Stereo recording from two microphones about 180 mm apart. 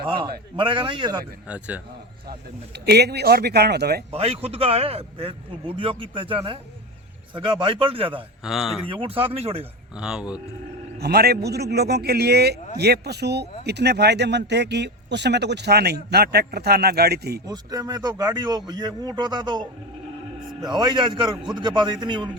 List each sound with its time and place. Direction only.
0.1 s a man's voice: 25° right (ahead or behind)
1.5 s a man's voice: 5° right (ahead or behind)
2.7 s speech: 65° right (ahead or behind)
4.1 s a man's voice: 35° right (ahead or behind)
8.4 s speech: centre (ahead or behind)
8.9 s a man's voice: 30° right (ahead or behind)
9.9 s speech: 5° right (ahead or behind)
10.9 s speech: 60° right (ahead or behind)
17.4 s a man's voice: 20° right (ahead or behind)